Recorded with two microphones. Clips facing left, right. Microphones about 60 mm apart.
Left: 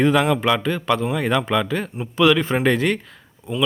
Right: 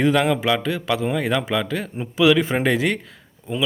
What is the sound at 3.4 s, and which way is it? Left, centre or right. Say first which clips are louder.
Speech: even; centre.